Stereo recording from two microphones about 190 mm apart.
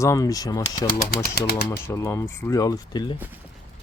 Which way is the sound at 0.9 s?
55° left (ahead or behind).